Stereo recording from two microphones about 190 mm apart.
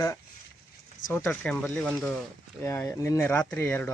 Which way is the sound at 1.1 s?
10° left (ahead or behind).